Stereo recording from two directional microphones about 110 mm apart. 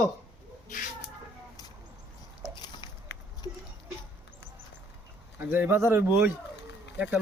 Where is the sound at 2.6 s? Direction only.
40° left (ahead or behind).